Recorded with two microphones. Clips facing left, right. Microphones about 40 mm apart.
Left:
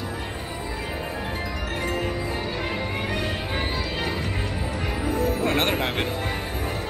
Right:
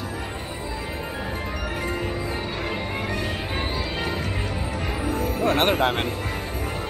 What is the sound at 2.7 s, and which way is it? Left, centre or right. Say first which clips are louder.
Music: even; centre.